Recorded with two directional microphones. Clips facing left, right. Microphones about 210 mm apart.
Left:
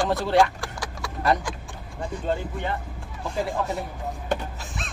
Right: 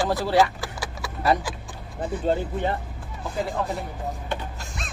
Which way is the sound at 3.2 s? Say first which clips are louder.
Left 1 dB; centre (ahead or behind).